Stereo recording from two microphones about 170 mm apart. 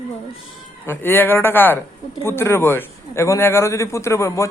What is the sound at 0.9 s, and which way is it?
A man's voice, 10° left (ahead or behind).